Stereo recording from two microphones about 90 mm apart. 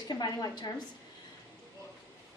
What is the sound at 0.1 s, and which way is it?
Speech, 50° left (ahead or behind).